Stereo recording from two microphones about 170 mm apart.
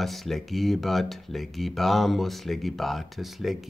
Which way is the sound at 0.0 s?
Centre (ahead or behind).